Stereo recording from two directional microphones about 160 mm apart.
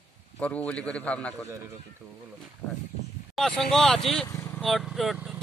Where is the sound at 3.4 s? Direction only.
Centre (ahead or behind).